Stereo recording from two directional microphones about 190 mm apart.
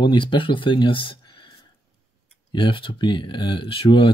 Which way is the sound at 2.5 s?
25° left (ahead or behind).